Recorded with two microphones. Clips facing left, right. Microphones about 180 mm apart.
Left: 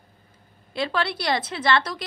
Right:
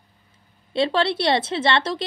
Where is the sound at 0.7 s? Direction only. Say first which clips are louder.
Right 6 dB; 25° right (ahead or behind).